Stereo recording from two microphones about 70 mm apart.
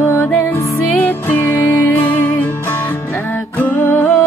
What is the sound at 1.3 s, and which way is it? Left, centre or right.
Music, left.